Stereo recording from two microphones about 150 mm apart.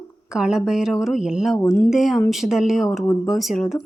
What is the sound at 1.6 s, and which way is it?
Speech, 15° left (ahead or behind).